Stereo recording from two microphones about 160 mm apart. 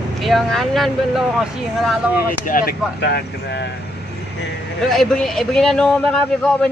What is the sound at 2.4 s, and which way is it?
Speech, 65° left (ahead or behind).